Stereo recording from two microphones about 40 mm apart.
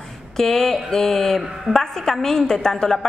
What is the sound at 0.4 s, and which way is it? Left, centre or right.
Speech, centre.